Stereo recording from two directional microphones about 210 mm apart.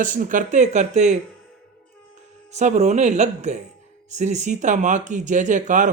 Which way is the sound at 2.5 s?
35° right (ahead or behind).